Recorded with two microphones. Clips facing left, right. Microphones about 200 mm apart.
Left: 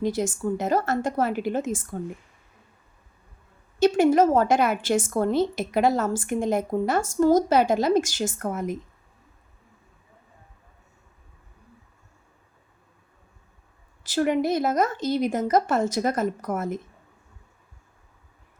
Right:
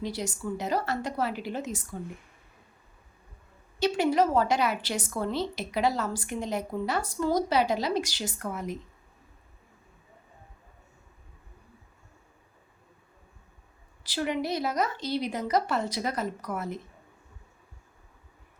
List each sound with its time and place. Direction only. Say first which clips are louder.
0.0 s a woman's voice: left 8 dB; 50° left (ahead or behind)
3.8 s a woman's voice: left 6 dB; 50° left (ahead or behind)
14.0 s a woman's voice: left 7 dB; 50° left (ahead or behind)